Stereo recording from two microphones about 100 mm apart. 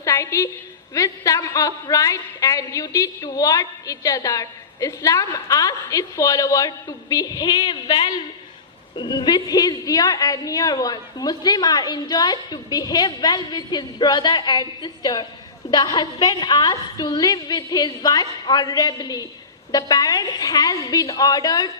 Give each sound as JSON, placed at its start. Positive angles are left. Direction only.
{"t": 0.0, "sound": "a woman's voice", "side_deg": 30}